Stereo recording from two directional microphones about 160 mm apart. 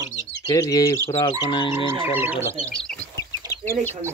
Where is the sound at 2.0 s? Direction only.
10° right (ahead or behind).